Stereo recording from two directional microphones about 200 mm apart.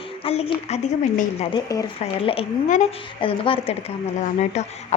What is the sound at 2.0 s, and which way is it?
A woman's voice, 30° left (ahead or behind).